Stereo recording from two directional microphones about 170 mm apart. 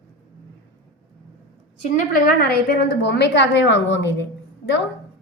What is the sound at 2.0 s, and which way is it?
A woman's voice, 55° left (ahead or behind).